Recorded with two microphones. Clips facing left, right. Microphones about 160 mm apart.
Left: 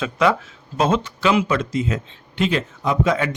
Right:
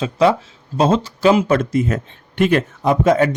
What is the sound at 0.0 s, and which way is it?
Speech, 30° right (ahead or behind).